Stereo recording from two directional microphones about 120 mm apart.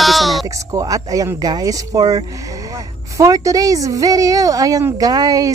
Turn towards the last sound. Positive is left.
turn(degrees=-30)  # may be behind; listen again after turning